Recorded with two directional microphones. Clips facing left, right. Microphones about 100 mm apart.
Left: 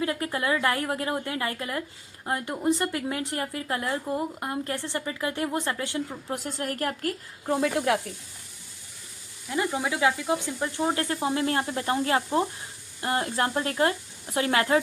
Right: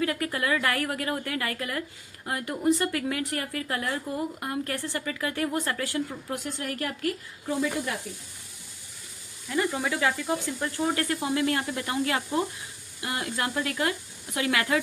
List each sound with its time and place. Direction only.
0.0 s a woman's voice: 25° left (ahead or behind)
7.5 s speech: 75° left (ahead or behind)
9.5 s a woman's voice: 20° left (ahead or behind)